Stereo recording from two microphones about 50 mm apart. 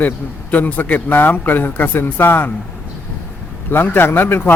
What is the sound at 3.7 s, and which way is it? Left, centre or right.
Speech, left.